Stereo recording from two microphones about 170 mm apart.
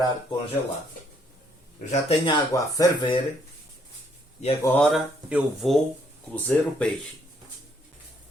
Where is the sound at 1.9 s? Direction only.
35° left (ahead or behind).